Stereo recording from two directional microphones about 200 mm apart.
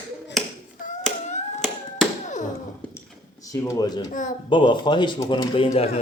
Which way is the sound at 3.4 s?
15° left (ahead or behind).